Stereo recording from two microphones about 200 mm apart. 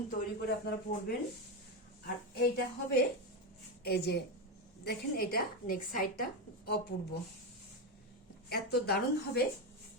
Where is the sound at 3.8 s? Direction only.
55° left (ahead or behind).